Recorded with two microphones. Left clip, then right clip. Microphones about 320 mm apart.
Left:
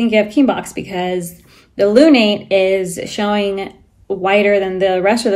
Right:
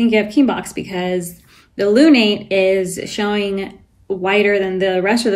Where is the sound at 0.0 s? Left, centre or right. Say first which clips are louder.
Left 2 dB; centre.